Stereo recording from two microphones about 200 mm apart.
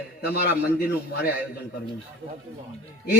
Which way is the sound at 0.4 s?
50° left (ahead or behind).